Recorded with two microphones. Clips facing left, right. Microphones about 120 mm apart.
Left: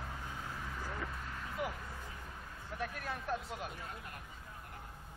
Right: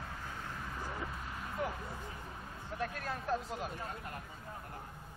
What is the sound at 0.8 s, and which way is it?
Vehicle, 10° right (ahead or behind).